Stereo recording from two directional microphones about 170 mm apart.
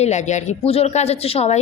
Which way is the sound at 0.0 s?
45° left (ahead or behind).